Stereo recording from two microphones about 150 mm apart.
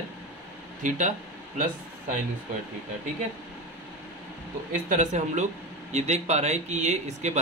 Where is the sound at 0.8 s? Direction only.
55° right (ahead or behind).